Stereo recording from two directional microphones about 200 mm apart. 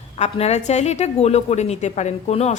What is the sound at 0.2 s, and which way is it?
A woman's voice, 35° left (ahead or behind).